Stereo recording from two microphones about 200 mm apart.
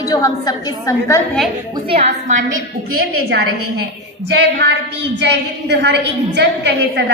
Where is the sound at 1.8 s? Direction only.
30° right (ahead or behind).